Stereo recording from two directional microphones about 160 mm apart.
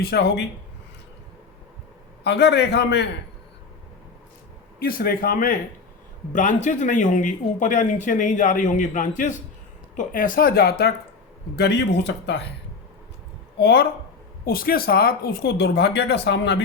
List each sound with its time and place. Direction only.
0.0 s speech: 90° left
2.2 s speech: 90° left
4.8 s speech: 65° left (ahead or behind)
6.3 s speech: 50° left (ahead or behind); by 12.5 s 90° left
13.6 s speech: 90° left
14.4 s speech: 70° left (ahead or behind); by 16.6 s 90° left